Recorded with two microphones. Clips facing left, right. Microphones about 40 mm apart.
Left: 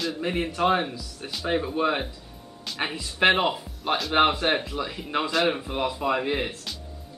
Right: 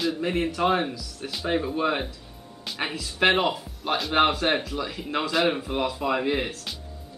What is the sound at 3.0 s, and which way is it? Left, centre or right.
Speech, centre.